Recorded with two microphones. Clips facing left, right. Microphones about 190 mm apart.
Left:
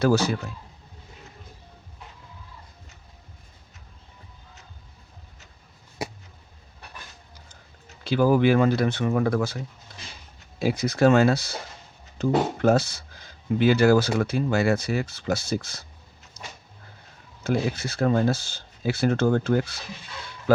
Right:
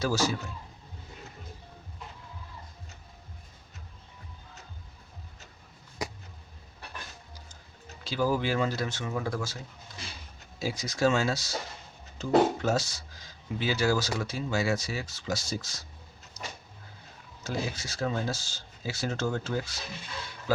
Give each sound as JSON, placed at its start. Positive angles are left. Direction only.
{"t": 0.0, "sound": "speech", "side_deg": 60}
{"t": 8.0, "sound": "speech", "side_deg": 60}
{"t": 10.6, "sound": "speech", "side_deg": 60}
{"t": 16.4, "sound": "a sound", "side_deg": 60}
{"t": 17.4, "sound": "speech", "side_deg": 60}